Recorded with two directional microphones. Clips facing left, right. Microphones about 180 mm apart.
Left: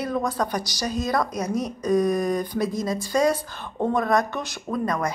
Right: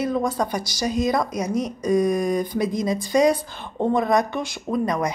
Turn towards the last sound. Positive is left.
turn(degrees=-15)  # may be behind; listen again after turning